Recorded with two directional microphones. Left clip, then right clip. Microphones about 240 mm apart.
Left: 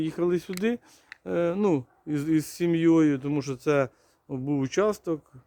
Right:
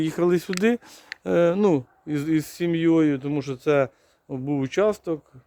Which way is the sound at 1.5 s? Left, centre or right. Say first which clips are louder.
Right 4 dB; centre.